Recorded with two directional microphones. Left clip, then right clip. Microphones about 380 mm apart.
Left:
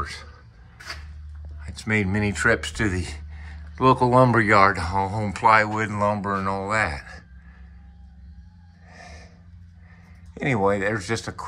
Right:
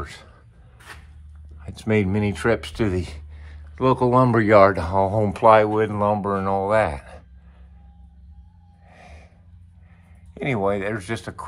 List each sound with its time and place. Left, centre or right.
0.0 s a sound: centre
1.8 s speech: centre
8.8 s gasp: centre
10.3 s speech: centre